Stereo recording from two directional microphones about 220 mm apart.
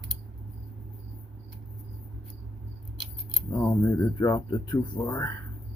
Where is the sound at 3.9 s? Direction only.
15° left (ahead or behind).